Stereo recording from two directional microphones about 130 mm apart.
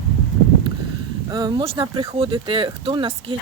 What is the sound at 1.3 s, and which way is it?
Speech, 35° right (ahead or behind).